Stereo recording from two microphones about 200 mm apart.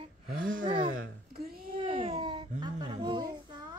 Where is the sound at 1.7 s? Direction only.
25° right (ahead or behind).